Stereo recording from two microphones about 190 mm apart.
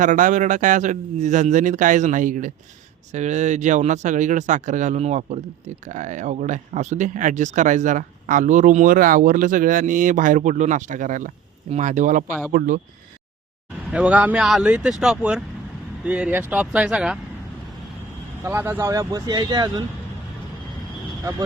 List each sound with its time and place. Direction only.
0.0 s speech: 45° right (ahead or behind)
13.9 s speech: 5° right (ahead or behind)
18.4 s speech: 10° right (ahead or behind)